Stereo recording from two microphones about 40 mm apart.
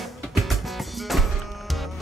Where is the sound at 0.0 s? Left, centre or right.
Centre.